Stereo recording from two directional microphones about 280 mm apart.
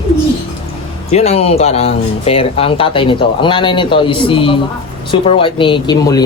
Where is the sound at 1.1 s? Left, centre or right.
Left.